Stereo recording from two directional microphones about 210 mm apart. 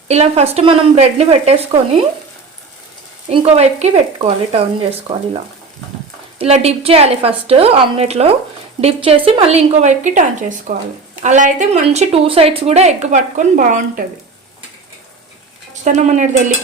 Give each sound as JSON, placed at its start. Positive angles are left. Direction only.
{"t": 0.1, "sound": "speech", "side_deg": -30}
{"t": 3.2, "sound": "speech", "side_deg": -30}
{"t": 6.4, "sound": "a woman's voice", "side_deg": -30}
{"t": 15.8, "sound": "a woman's voice", "side_deg": -35}